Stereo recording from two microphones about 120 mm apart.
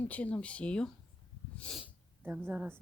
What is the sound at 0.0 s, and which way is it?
Speech, 15° left (ahead or behind).